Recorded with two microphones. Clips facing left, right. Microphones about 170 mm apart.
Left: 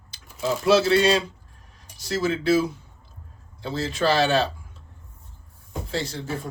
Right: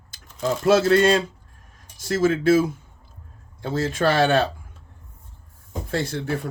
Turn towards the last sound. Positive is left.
turn(degrees=-55)  # may be behind; listen again after turning